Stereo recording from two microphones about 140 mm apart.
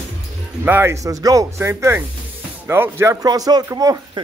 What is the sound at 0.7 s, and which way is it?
Speech, 15° right (ahead or behind).